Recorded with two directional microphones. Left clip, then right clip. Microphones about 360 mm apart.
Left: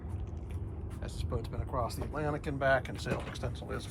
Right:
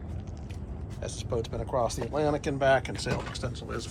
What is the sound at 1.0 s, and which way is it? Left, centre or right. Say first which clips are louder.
Speech: right 9 dB; centre.